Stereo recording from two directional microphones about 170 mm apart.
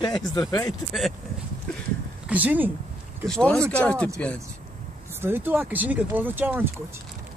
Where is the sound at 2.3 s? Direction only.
10° right (ahead or behind).